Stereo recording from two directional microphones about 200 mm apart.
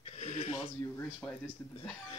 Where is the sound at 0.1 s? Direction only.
35° left (ahead or behind).